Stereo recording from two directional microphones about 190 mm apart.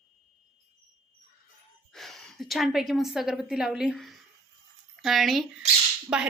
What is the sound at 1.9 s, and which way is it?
A woman's voice, centre (ahead or behind).